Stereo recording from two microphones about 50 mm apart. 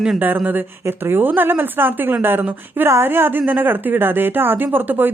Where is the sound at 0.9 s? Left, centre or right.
Right.